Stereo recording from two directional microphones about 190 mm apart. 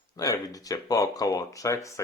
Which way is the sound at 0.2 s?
20° left (ahead or behind).